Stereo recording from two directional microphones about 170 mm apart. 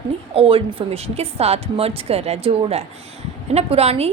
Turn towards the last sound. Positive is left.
turn(degrees=-35)  # may be behind; listen again after turning